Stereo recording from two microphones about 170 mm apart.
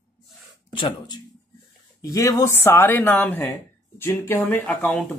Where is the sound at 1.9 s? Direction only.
20° left (ahead or behind).